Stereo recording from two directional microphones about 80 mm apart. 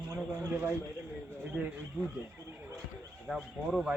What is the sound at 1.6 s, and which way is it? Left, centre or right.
Speech, centre.